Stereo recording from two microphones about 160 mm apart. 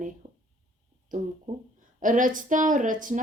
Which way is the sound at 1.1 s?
55° right (ahead or behind).